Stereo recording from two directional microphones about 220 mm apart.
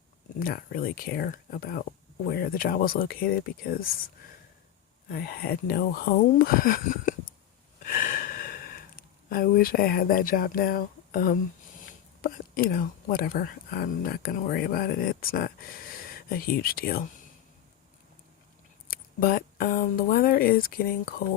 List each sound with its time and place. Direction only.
0.3 s speech: 40° left (ahead or behind)
5.0 s speech: 45° left (ahead or behind)
7.8 s gasp: 40° left (ahead or behind)
11.9 s speech: 40° left (ahead or behind)
18.9 s speech: 40° left (ahead or behind)